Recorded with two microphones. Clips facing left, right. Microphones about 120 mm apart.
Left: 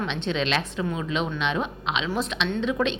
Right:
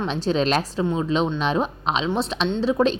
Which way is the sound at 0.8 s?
30° right (ahead or behind).